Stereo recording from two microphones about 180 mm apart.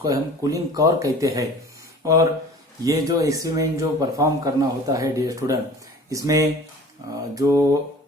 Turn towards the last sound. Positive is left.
turn(degrees=-20)  # may be behind; listen again after turning